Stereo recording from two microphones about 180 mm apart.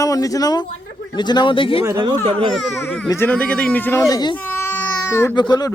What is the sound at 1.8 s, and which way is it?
Speech, 20° right (ahead or behind).